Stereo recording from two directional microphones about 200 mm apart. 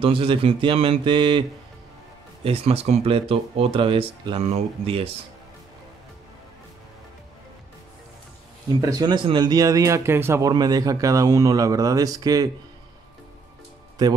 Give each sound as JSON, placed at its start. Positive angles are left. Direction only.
{"t": 0.0, "sound": "speech", "side_deg": -25}
{"t": 2.4, "sound": "speech", "side_deg": -30}
{"t": 8.8, "sound": "speech", "side_deg": -20}
{"t": 14.0, "sound": "speech", "side_deg": -20}